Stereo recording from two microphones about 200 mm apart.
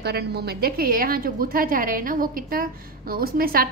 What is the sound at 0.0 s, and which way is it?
A woman's voice, 55° right (ahead or behind).